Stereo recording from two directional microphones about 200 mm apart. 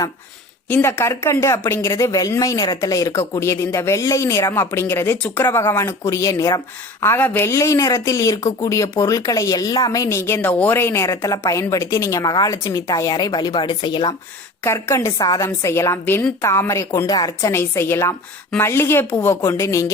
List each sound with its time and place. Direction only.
0.7 s speech: 10° left (ahead or behind)